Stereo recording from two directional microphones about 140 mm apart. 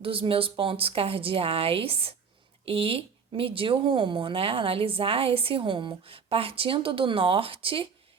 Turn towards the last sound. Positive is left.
turn(degrees=-40)  # may be behind; listen again after turning